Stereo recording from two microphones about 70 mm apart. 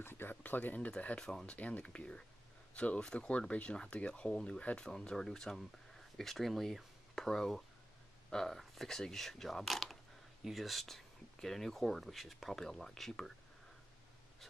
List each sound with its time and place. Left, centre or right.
0.0 s speech: left; by 13.3 s centre